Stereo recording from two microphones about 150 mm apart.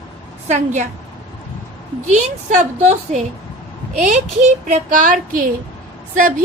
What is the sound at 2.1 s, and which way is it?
A woman's voice, 50° right (ahead or behind).